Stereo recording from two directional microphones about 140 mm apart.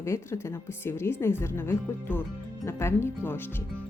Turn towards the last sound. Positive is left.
turn(degrees=15)  # may be behind; listen again after turning